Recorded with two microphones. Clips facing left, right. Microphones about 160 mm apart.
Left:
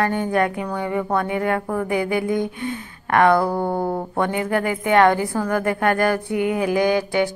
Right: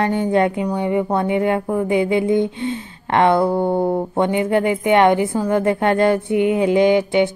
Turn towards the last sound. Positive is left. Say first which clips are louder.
# right 4 dB
turn(degrees=-20)  # may be behind; listen again after turning